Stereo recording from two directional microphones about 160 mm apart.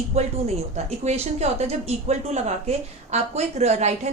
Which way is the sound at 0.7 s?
45° right (ahead or behind).